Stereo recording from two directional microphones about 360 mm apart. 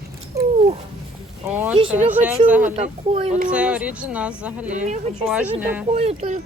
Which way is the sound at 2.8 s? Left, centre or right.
Centre.